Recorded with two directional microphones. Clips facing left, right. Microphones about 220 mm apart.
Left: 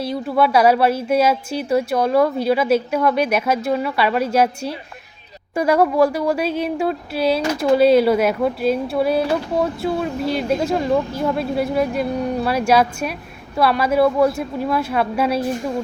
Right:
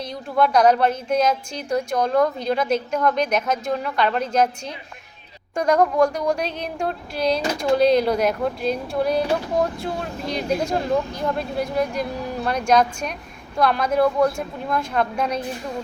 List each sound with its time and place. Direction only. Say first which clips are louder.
0.0 s speech: left 3 dB; 5° left (ahead or behind)